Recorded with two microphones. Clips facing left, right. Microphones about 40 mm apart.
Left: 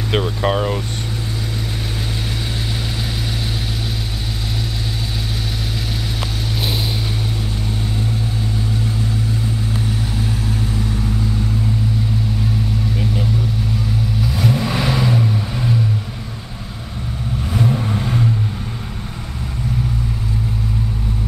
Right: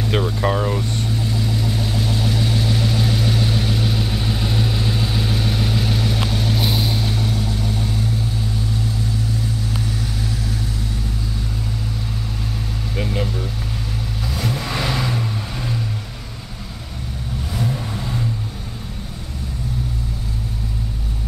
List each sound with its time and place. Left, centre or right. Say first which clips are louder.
0.1 s speech: left 3 dB; centre
2.4 s vehicle: right 4 dB; centre
13.0 s vehicle: right 2 dB; centre
14.2 s vehicle: left 4 dB; centre
17.6 s vehicle: left 6 dB; left